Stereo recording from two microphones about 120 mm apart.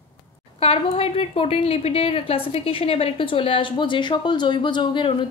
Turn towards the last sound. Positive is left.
turn(degrees=45)  # may be behind; listen again after turning